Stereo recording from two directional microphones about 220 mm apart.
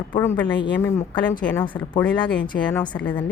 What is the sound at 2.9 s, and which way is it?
Speech, 5° left (ahead or behind).